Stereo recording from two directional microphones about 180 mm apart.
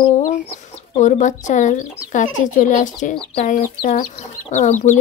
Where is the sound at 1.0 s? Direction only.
45° left (ahead or behind).